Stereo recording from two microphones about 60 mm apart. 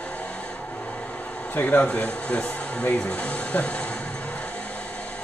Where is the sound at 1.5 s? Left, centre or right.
Left.